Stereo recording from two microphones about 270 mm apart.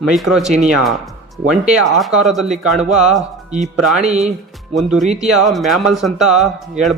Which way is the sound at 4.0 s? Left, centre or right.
Right.